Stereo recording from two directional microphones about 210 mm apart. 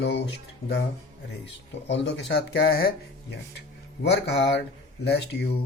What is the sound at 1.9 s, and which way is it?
Speech, 60° left (ahead or behind).